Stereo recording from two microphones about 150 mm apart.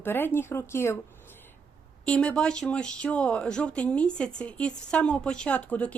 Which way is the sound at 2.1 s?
5° left (ahead or behind).